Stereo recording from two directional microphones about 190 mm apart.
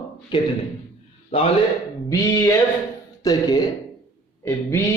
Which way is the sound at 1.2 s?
30° left (ahead or behind).